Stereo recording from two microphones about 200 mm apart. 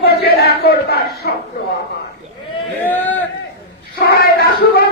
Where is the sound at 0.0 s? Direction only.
50° left (ahead or behind).